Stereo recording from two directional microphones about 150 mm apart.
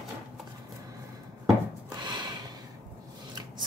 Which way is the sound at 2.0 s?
30° right (ahead or behind).